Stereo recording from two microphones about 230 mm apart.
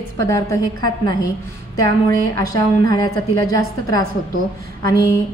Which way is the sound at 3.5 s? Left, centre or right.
Centre.